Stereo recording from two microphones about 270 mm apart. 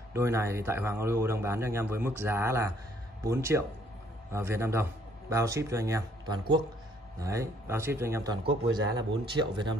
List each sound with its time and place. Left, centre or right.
0.1 s a man's voice: centre